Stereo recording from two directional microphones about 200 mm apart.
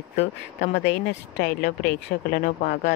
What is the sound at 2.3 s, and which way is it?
Speech, 50° left (ahead or behind).